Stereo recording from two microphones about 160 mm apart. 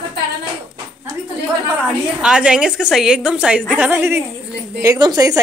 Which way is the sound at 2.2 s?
5° right (ahead or behind).